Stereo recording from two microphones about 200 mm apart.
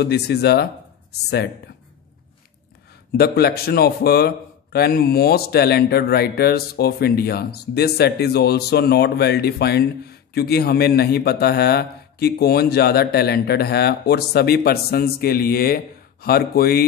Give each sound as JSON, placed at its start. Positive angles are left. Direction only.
{"t": 0.0, "sound": "a man's voice", "side_deg": 55}
{"t": 3.2, "sound": "a man's voice", "side_deg": 50}